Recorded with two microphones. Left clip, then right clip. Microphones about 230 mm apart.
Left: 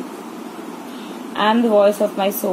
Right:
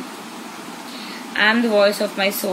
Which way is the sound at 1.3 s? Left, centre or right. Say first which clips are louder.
Left 1 dB; right.